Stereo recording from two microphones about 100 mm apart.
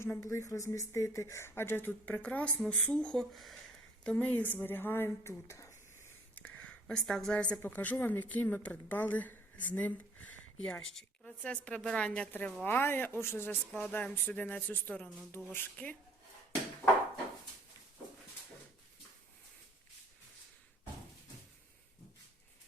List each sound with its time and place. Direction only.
0.0 s speech: 30° left (ahead or behind)
6.3 s a sound: 20° left (ahead or behind)
7.6 s a woman's voice: 15° left (ahead or behind)